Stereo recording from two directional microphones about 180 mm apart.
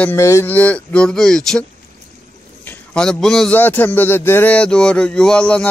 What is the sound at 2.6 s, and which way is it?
A man's voice, 5° left (ahead or behind).